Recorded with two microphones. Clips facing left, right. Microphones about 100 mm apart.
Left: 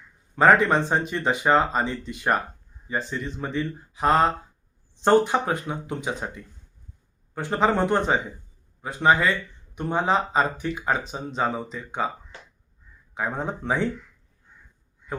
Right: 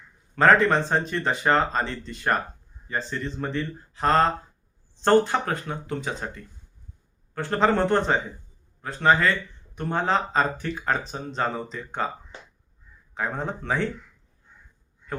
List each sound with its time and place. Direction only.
0.3 s speech: 10° left (ahead or behind)
13.1 s speech: 10° left (ahead or behind)